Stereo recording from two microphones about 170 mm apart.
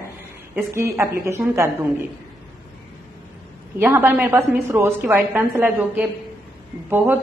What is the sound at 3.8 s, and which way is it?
A woman's voice, 10° right (ahead or behind).